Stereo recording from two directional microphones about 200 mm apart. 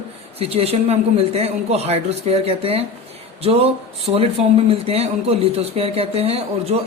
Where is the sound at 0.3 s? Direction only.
30° right (ahead or behind).